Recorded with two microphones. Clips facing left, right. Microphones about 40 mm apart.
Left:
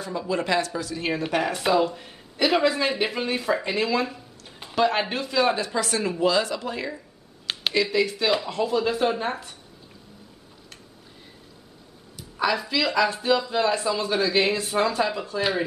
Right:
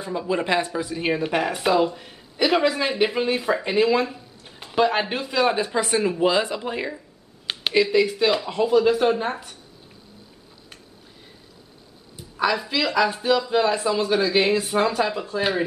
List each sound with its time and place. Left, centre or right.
0.0 s a woman's voice: centre
3.6 s a sound: centre
4.7 s speech: centre
5.6 s a woman's voice: centre
7.4 s speech: centre
12.4 s speech: centre